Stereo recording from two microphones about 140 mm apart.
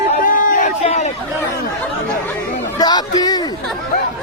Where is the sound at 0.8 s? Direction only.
50° left (ahead or behind).